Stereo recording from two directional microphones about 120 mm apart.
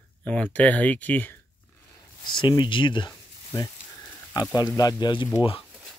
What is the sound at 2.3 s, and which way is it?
Speech, 40° left (ahead or behind).